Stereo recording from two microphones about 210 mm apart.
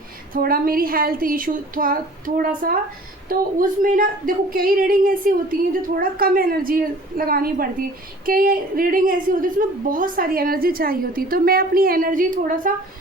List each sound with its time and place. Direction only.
0.3 s a woman's voice: 45° right (ahead or behind)